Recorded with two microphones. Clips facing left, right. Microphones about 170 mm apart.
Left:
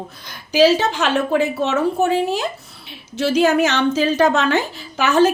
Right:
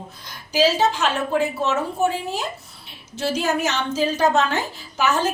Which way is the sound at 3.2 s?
85° left.